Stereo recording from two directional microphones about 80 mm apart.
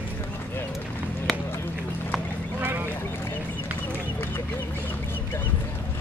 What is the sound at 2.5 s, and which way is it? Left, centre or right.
Boat, right.